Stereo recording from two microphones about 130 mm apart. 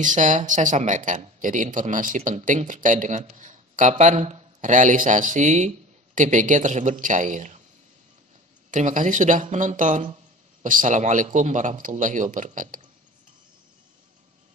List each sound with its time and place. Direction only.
0.0 s speech: 75° right (ahead or behind)
4.0 s speech: 65° right (ahead or behind)
8.6 s a man's voice: 75° right (ahead or behind)
10.6 s a man's voice: 85° right